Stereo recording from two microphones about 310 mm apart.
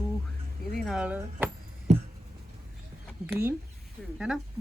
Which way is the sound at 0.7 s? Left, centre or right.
Centre.